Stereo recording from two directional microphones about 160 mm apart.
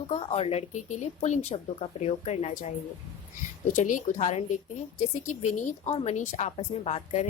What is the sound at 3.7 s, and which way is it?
A woman's voice, 50° left (ahead or behind).